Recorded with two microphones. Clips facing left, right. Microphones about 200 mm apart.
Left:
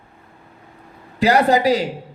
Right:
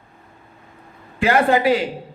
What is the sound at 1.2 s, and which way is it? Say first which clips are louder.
Speech: left 1 dB; 40° left (ahead or behind).